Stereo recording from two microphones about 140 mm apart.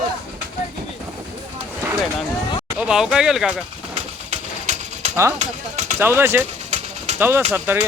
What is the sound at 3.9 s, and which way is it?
Bird, 55° right (ahead or behind).